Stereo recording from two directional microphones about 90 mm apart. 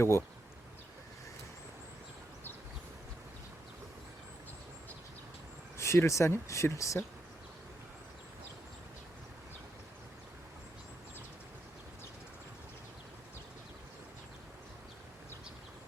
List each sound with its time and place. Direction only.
0.0 s speech: 30° left (ahead or behind)
5.7 s speech: 30° left (ahead or behind)